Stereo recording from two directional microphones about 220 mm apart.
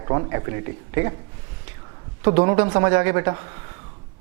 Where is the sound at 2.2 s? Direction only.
15° right (ahead or behind).